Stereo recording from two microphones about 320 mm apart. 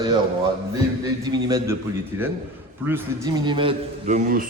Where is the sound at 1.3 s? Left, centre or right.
Centre.